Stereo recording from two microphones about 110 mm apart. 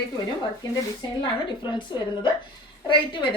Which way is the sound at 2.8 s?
50° left (ahead or behind).